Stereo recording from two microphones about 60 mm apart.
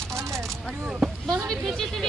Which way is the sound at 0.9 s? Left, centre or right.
Centre.